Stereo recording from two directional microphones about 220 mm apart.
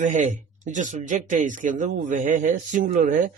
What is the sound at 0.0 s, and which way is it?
Speech, 35° right (ahead or behind).